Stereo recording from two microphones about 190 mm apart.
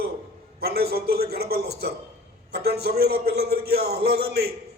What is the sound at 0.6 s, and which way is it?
A man's voice, 55° right (ahead or behind).